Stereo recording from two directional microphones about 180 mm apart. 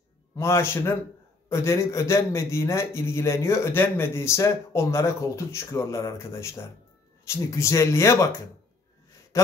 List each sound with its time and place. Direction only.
0.4 s a man's voice: 15° left (ahead or behind)